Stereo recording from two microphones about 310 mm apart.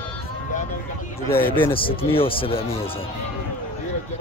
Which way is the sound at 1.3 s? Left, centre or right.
Centre.